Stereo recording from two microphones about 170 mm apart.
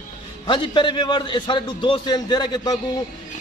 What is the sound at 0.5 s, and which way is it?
A man's voice, 30° left (ahead or behind).